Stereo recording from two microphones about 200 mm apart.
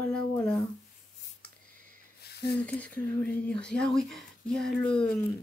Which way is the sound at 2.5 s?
5° left (ahead or behind).